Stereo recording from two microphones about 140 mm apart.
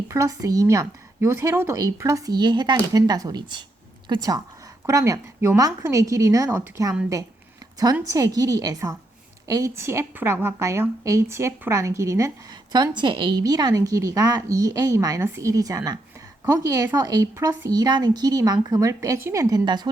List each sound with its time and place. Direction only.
0.1 s speech: 25° right (ahead or behind)
8.0 s speech: 25° right (ahead or behind)